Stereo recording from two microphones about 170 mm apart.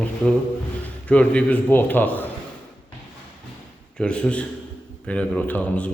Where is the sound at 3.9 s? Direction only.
5° left (ahead or behind).